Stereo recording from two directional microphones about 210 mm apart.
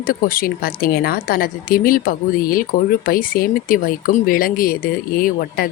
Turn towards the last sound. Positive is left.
turn(degrees=45)  # may be behind; listen again after turning